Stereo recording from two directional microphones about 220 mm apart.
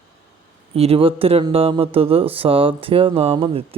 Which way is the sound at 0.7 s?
25° right (ahead or behind).